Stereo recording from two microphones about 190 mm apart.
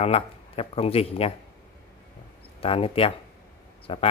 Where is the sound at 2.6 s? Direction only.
30° left (ahead or behind).